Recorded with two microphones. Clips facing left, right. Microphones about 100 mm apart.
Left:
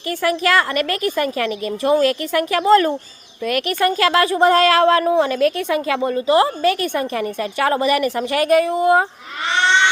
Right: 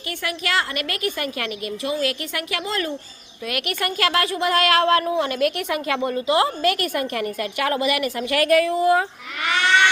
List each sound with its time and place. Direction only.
0.2 s a woman's voice: 40° left (ahead or behind)
9.5 s cat: 25° left (ahead or behind)